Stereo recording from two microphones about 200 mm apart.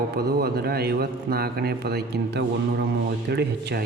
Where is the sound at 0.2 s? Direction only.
50° right (ahead or behind).